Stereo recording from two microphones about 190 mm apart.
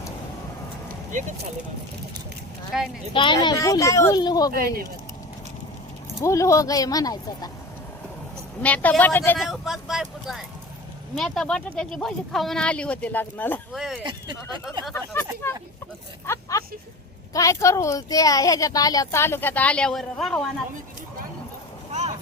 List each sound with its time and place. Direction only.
1.1 s speech: 40° right (ahead or behind)
2.7 s speech: centre (ahead or behind)
3.1 s speech: 25° left (ahead or behind)
6.2 s speech: 15° left (ahead or behind)
8.6 s speech: 10° left (ahead or behind)
9.5 s speech: centre (ahead or behind)
13.7 s speech: centre (ahead or behind)
14.0 s speech: 25° right (ahead or behind)
14.9 s speech: 10° left (ahead or behind)